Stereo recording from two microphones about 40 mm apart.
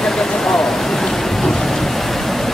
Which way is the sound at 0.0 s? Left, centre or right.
Centre.